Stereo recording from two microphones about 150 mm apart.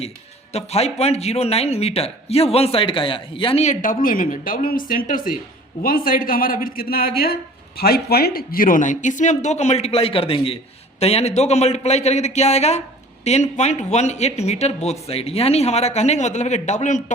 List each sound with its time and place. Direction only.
0.5 s a man's voice: 45° left (ahead or behind)
3.6 s a woman's voice: 60° left (ahead or behind)
6.7 s a man's voice: 85° left; by 17.0 s 55° left (ahead or behind)